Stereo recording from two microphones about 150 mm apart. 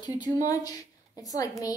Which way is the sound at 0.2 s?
25° left (ahead or behind).